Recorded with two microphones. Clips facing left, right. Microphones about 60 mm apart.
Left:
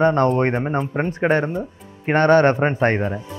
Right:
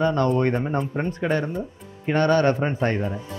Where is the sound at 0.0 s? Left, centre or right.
Left.